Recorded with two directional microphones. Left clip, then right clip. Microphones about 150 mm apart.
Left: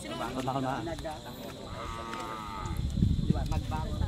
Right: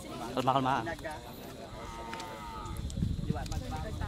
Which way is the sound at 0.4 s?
20° right (ahead or behind).